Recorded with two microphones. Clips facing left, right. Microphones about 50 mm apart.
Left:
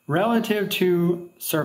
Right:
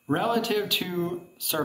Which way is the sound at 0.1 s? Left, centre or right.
Left.